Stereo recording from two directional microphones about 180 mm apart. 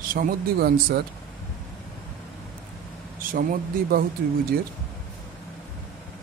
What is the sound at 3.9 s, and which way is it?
Speech, 55° right (ahead or behind).